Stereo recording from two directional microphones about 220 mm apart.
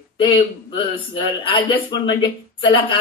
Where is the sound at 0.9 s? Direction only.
20° left (ahead or behind).